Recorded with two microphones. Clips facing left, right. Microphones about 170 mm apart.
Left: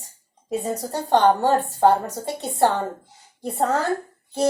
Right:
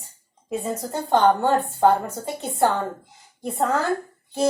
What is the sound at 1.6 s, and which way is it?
A woman's voice, 35° left (ahead or behind).